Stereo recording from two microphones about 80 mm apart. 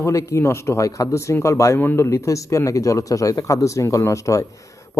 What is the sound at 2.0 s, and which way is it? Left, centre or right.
A man's voice, left.